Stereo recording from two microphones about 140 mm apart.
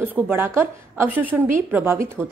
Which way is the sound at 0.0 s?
15° right (ahead or behind).